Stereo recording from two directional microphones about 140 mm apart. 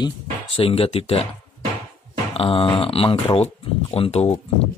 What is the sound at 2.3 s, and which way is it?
Speech, 40° left (ahead or behind).